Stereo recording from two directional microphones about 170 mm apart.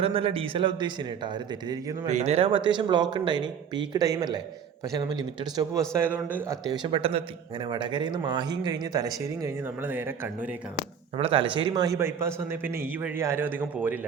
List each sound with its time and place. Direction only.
0.0 s a man's voice: 35° right (ahead or behind)
2.0 s a man's voice: 40° right (ahead or behind); by 5.8 s 25° right (ahead or behind)
5.9 s a man's voice: 10° right (ahead or behind)
6.8 s a man's voice: 30° right (ahead or behind); by 10.5 s 10° right (ahead or behind)
11.2 s a man's voice: 30° right (ahead or behind); by 14.1 s 10° right (ahead or behind)